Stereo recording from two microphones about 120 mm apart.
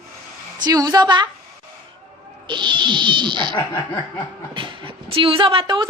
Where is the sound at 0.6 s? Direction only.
30° right (ahead or behind).